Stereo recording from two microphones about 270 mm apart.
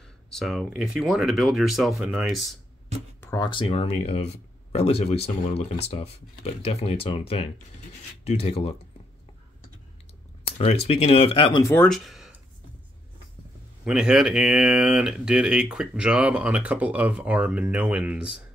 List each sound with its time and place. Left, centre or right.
0.3 s speech: centre
3.2 s speech: centre
10.9 s speech: left; by 12.4 s centre
13.8 s speech: centre